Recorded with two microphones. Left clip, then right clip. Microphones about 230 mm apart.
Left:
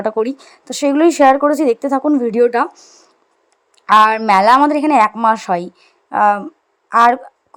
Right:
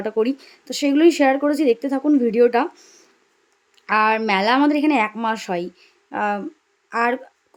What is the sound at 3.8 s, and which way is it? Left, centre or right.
Speech, centre.